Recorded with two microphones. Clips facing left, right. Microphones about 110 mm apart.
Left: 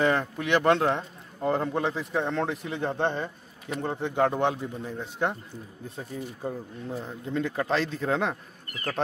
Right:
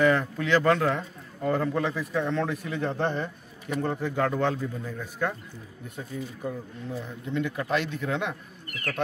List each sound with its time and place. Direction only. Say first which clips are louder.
0.0 s a man's voice: right 2 dB; 25° left (ahead or behind)